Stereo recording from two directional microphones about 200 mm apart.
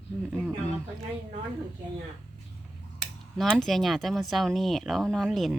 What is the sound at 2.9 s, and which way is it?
Speech, centre (ahead or behind).